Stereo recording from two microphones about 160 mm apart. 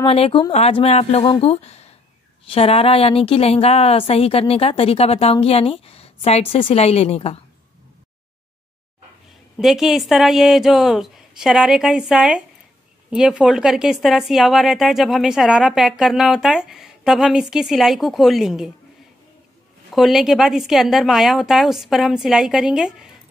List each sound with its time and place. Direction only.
0.0 s a woman's voice: 35° left (ahead or behind)
9.6 s a woman's voice: centre (ahead or behind)
19.9 s a woman's voice: centre (ahead or behind)